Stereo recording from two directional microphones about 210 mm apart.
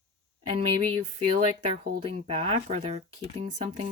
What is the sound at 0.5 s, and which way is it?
Speech, 25° right (ahead or behind).